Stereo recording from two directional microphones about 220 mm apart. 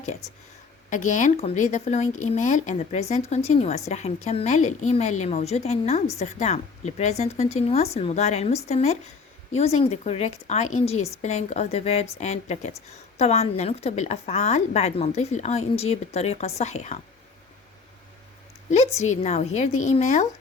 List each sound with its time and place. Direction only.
0.9 s a woman's voice: 35° left (ahead or behind)
18.9 s speech: 30° left (ahead or behind)